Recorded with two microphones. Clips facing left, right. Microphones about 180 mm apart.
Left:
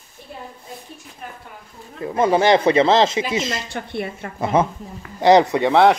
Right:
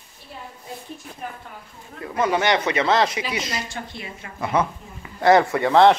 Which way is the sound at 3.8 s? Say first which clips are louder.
Left 9 dB; 60° left (ahead or behind).